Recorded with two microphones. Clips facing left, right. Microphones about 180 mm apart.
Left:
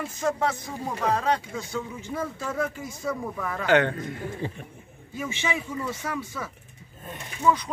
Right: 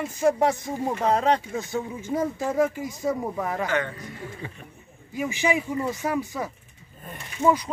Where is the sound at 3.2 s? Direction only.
35° right (ahead or behind).